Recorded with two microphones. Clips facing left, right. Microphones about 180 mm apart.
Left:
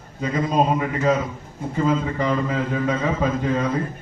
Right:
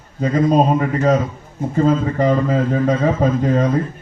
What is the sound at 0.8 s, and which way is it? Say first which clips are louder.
A man's voice: right 4 dB; 40° right (ahead or behind).